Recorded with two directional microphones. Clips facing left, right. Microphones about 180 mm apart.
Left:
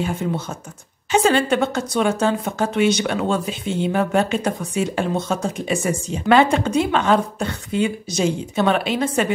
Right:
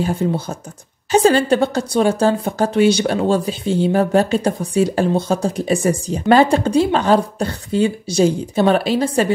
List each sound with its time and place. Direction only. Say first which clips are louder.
0.0 s a woman's voice: right 4 dB; 35° right (ahead or behind)